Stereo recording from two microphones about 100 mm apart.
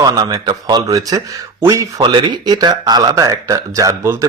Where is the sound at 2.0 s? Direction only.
50° right (ahead or behind).